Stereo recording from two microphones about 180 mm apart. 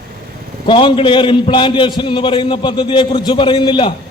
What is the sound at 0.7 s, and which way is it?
A man's voice, 30° left (ahead or behind).